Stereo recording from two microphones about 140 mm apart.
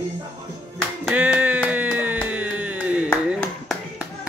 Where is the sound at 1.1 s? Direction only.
10° right (ahead or behind).